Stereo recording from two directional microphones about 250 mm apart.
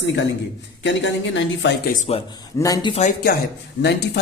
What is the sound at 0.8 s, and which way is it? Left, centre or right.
Speech, left.